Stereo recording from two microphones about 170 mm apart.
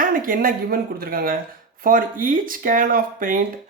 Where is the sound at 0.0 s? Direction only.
55° right (ahead or behind).